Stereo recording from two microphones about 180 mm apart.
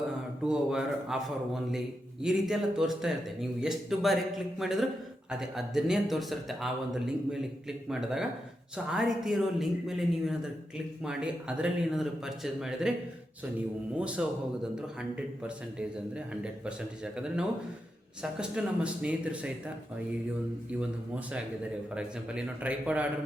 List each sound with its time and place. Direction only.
0.4 s speech: 5° right (ahead or behind)
14.0 s speech: 5° right (ahead or behind)
21.9 s speech: 5° right (ahead or behind)